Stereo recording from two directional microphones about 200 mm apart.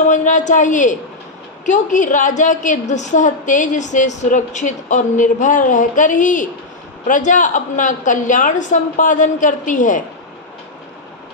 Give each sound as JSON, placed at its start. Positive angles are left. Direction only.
{"t": 0.1, "sound": "a woman's voice", "side_deg": 40}